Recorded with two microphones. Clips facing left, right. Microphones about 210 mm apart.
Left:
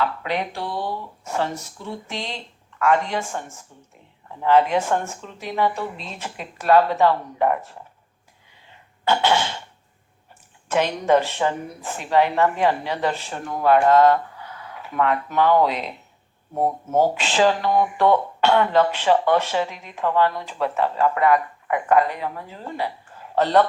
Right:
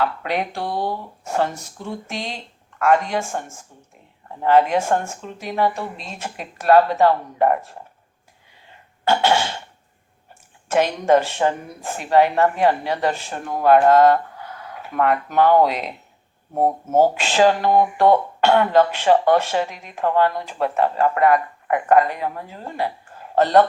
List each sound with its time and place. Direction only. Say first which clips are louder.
0.0 s a woman's voice: right 2 dB; 50° right (ahead or behind)
4.4 s a woman's voice: right 2 dB; 50° right (ahead or behind)
9.0 s a woman's voice: right 2 dB; 50° right (ahead or behind)
10.7 s a woman's voice: right 2 dB; 45° right (ahead or behind)
17.2 s a woman's voice: right 3 dB; 45° right (ahead or behind)